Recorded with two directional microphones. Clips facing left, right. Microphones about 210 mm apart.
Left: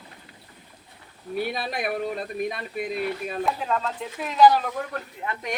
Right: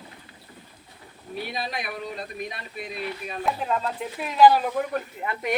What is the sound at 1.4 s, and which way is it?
Speech, 55° left (ahead or behind).